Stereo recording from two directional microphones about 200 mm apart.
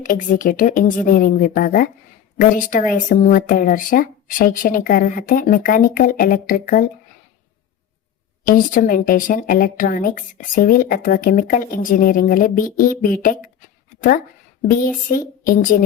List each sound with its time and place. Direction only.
0.0 s a woman's voice: 40° left (ahead or behind)
8.4 s a woman's voice: 45° left (ahead or behind)
14.7 s a woman's voice: 45° left (ahead or behind)